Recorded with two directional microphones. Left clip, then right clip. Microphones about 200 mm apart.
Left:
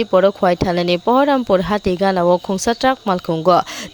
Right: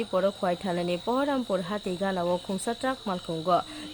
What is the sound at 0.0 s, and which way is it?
Speech, 35° left (ahead or behind).